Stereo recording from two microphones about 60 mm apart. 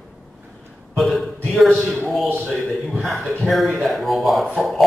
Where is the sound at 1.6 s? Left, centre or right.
Left.